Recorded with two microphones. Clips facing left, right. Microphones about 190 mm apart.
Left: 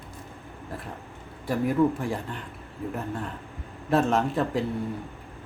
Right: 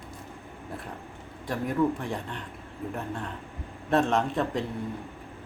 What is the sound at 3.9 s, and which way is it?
Speech, 5° left (ahead or behind).